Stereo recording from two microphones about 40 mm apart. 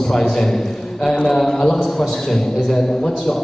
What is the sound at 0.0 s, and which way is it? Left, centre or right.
A man's voice, centre.